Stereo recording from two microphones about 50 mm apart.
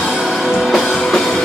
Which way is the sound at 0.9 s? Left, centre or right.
Centre.